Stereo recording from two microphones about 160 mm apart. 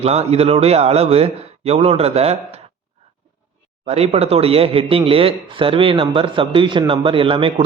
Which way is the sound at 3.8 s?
40° right (ahead or behind).